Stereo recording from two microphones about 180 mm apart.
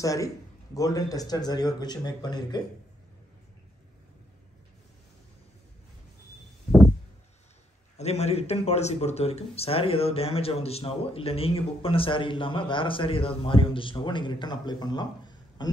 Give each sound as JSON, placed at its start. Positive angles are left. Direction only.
{"t": 0.0, "sound": "a man's voice", "side_deg": 20}
{"t": 8.0, "sound": "speech", "side_deg": 35}